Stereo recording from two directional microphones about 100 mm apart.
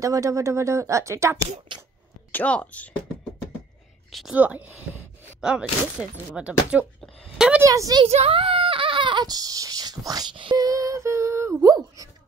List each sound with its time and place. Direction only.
0.0 s speech: 35° right (ahead or behind)
1.7 s speech: 55° right (ahead or behind)
2.3 s a woman's voice: 15° left (ahead or behind)
4.3 s speech: 15° right (ahead or behind)
7.3 s a sound: 10° right (ahead or behind)
7.6 s speech: 35° right (ahead or behind)
8.0 s speech: 75° right (ahead or behind); by 10.2 s 40° right (ahead or behind)
10.3 s a sound: 55° right (ahead or behind)
10.6 s a sound: 35° right (ahead or behind)